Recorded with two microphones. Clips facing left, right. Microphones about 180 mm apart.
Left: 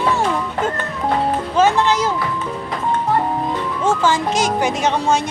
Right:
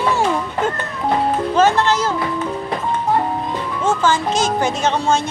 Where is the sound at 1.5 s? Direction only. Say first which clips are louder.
Even; 10° left (ahead or behind).